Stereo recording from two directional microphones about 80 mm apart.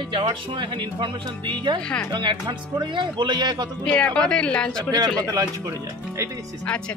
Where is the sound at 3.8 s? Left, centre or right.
Centre.